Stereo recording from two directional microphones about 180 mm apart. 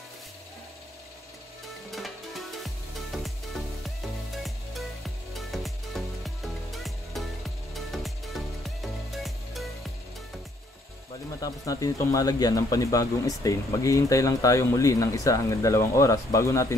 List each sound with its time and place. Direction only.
1.9 s music: centre (ahead or behind)
5.5 s music: centre (ahead or behind)
11.4 s speech: 20° left (ahead or behind)